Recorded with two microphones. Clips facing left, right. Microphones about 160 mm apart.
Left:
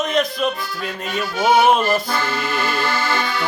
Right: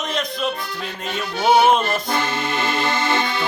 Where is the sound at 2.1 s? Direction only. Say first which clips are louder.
Even; 20° right (ahead or behind).